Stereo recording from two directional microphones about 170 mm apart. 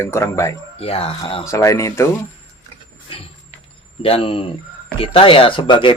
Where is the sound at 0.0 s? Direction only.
15° left (ahead or behind).